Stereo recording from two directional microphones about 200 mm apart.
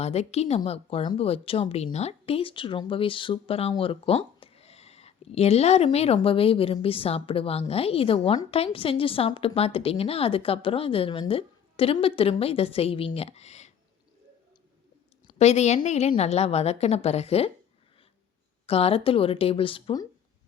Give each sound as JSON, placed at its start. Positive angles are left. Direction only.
{"t": 0.0, "sound": "a woman's voice", "side_deg": 30}
{"t": 15.4, "sound": "a woman's voice", "side_deg": 35}
{"t": 18.6, "sound": "a woman's voice", "side_deg": 30}